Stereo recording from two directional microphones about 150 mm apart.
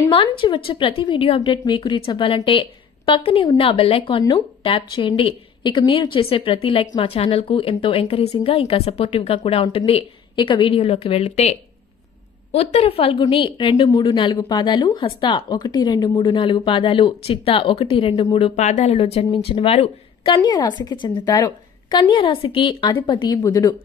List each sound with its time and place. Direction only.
0.1 s a woman's voice: 35° left (ahead or behind)
12.5 s a woman's voice: 40° left (ahead or behind)
18.6 s speech: 55° left (ahead or behind)
18.9 s a woman's voice: 40° left (ahead or behind)
20.3 s a woman's voice: 25° left (ahead or behind)